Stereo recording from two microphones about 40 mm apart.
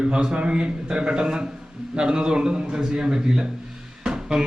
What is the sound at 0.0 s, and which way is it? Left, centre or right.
A man's voice, right.